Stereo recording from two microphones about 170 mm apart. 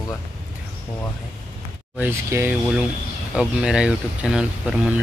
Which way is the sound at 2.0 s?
15° right (ahead or behind).